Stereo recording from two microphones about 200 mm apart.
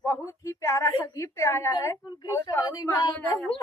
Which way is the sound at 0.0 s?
15° left (ahead or behind).